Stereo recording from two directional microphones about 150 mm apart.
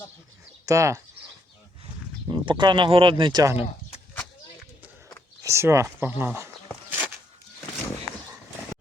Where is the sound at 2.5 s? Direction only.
30° right (ahead or behind).